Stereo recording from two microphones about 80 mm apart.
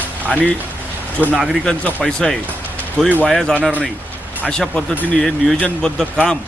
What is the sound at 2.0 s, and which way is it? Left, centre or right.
Speech, centre.